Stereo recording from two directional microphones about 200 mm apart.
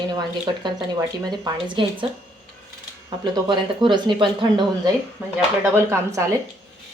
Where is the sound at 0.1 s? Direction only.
20° right (ahead or behind).